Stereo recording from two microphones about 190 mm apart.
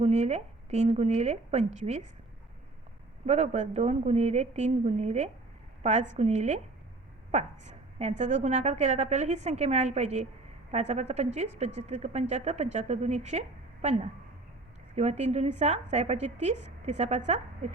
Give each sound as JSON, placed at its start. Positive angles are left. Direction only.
{"t": 0.0, "sound": "a woman's voice", "side_deg": -35}
{"t": 3.2, "sound": "a woman's voice", "side_deg": -35}